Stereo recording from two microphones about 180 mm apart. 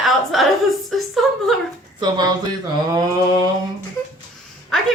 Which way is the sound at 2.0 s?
25° right (ahead or behind).